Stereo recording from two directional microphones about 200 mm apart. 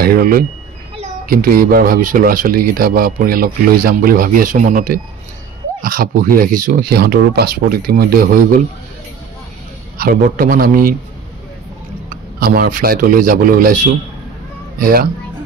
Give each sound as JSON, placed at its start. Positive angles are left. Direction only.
{"t": 0.0, "sound": "speech", "side_deg": -45}
{"t": 9.9, "sound": "speech", "side_deg": -45}
{"t": 12.1, "sound": "speech", "side_deg": -45}
{"t": 14.8, "sound": "speech", "side_deg": -45}